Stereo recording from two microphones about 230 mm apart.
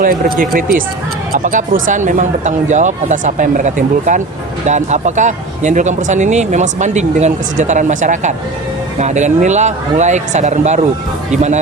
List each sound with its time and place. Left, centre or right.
0.0 s speech: right